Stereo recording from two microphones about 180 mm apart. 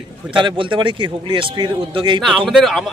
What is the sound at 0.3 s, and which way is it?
A man's voice, 25° right (ahead or behind).